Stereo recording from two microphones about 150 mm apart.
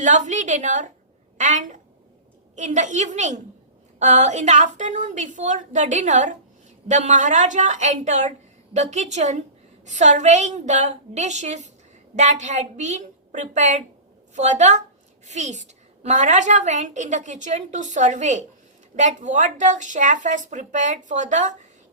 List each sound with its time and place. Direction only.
0.0 s a child's voice: 55° right (ahead or behind)